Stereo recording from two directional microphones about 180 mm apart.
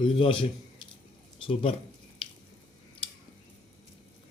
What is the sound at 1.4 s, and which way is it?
Speech, 35° left (ahead or behind).